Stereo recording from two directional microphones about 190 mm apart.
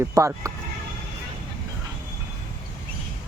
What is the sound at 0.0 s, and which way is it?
Speech, 15° right (ahead or behind).